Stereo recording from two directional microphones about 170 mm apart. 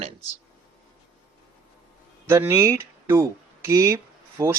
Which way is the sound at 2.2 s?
15° right (ahead or behind).